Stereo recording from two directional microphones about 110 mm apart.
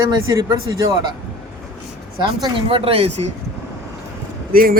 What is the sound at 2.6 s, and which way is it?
Speech, 60° right (ahead or behind).